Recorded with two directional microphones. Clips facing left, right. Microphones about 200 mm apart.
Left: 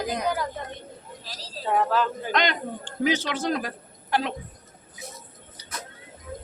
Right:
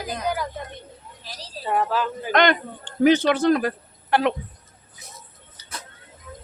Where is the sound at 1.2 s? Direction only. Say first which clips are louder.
Right 2 dB; 20° right (ahead or behind).